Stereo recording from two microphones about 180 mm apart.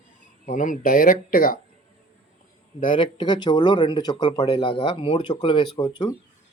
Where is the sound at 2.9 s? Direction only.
25° left (ahead or behind).